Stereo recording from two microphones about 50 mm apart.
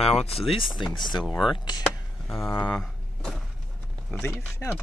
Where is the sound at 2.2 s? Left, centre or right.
Centre.